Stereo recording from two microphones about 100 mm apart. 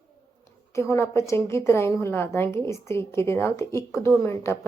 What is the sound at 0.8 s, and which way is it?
A woman's voice, 30° left (ahead or behind).